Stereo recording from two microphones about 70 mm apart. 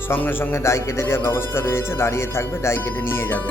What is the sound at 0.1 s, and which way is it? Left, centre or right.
Speech, left.